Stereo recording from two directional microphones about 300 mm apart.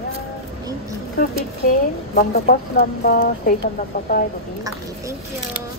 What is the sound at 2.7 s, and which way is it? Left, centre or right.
Speech, left.